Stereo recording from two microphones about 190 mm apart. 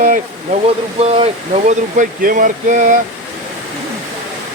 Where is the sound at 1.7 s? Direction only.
40° right (ahead or behind).